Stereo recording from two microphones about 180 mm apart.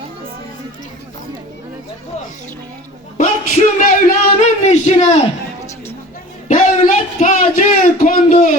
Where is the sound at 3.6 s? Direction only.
35° left (ahead or behind).